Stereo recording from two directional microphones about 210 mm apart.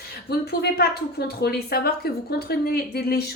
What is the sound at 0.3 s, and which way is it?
A woman's voice, 50° left (ahead or behind).